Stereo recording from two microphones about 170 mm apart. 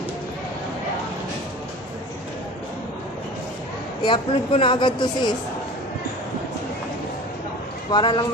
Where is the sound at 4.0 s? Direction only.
30° left (ahead or behind).